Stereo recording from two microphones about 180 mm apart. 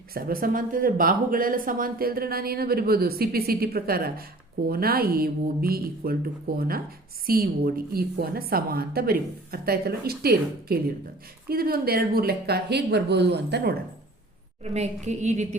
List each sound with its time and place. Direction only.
0.1 s speech: 55° right (ahead or behind)
14.6 s a woman's voice: 40° right (ahead or behind)